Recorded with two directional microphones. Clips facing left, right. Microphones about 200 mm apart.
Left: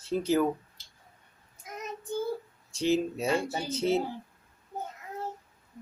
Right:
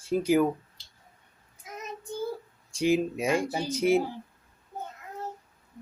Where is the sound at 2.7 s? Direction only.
10° right (ahead or behind).